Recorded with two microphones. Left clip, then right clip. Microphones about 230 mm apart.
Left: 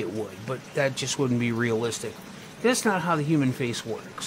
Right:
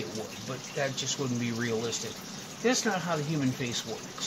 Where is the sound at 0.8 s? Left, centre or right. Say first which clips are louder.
Left 6 dB; left.